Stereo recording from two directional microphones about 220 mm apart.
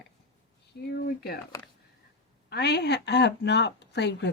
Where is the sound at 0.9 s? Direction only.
45° left (ahead or behind).